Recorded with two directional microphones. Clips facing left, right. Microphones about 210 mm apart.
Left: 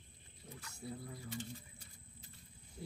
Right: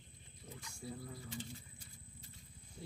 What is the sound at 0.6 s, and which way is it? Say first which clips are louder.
Speech: even; 10° right (ahead or behind).